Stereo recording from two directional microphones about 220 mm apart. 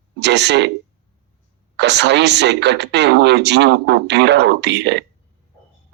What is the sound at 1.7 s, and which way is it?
Speech, 50° right (ahead or behind).